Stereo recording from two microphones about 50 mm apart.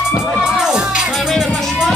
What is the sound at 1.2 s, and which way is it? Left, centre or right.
Music, centre.